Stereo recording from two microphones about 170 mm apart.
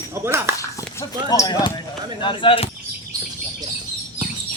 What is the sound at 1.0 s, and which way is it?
Speech, 20° left (ahead or behind).